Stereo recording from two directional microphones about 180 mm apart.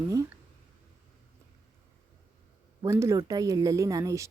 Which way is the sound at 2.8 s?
15° right (ahead or behind).